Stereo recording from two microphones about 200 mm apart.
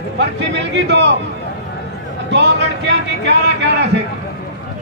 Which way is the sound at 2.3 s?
60° right (ahead or behind).